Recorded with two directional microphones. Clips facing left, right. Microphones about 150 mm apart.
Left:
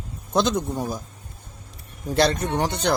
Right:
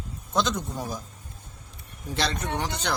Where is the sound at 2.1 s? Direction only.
50° left (ahead or behind).